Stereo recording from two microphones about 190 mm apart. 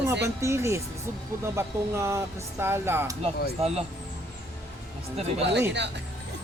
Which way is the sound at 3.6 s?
30° right (ahead or behind).